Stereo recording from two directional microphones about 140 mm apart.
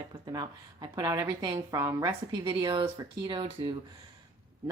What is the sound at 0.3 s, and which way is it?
A woman's voice, 30° right (ahead or behind).